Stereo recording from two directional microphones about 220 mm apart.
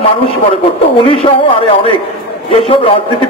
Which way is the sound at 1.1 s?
25° left (ahead or behind).